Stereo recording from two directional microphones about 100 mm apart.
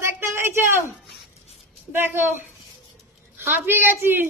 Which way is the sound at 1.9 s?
25° right (ahead or behind).